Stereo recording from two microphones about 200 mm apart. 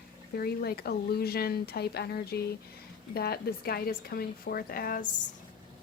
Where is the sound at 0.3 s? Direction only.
50° left (ahead or behind).